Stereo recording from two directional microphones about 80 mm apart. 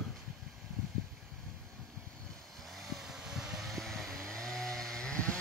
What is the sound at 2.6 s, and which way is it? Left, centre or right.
Vehicle, centre.